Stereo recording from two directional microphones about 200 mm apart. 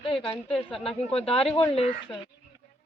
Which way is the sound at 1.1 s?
30° left (ahead or behind).